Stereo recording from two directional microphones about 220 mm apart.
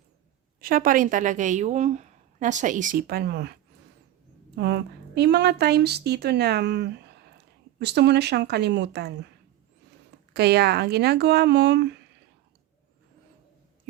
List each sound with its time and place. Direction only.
0.6 s a woman's voice: 40° right (ahead or behind)
4.5 s a woman's voice: 50° right (ahead or behind)
10.3 s speech: 45° right (ahead or behind)